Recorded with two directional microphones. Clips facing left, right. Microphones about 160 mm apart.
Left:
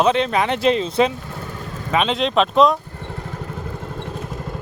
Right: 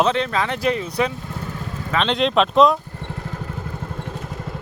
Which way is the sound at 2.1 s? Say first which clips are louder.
Even; centre (ahead or behind).